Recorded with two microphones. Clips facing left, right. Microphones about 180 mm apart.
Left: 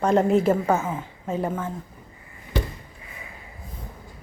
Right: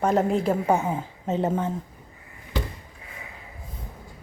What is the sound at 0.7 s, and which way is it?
Speech, 20° right (ahead or behind).